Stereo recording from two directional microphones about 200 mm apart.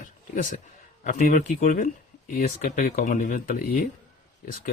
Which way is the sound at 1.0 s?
40° left (ahead or behind).